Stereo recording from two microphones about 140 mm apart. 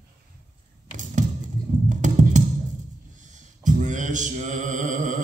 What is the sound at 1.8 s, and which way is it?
Music, 60° right (ahead or behind).